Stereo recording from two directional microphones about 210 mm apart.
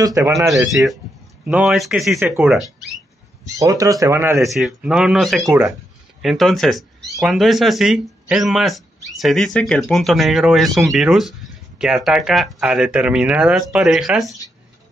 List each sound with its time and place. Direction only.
0.0 s speech: 15° right (ahead or behind)
0.7 s speech: centre (ahead or behind)
3.5 s speech: 15° right (ahead or behind); by 14.4 s centre (ahead or behind)